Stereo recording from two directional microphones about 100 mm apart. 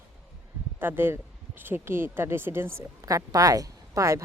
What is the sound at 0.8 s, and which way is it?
Speech, 20° right (ahead or behind).